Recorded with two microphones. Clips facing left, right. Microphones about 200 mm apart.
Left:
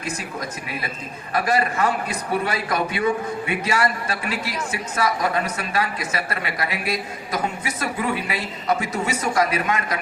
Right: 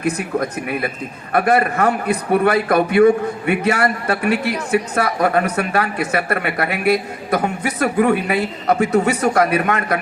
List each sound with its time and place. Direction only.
0.0 s a man's voice: 60° right (ahead or behind)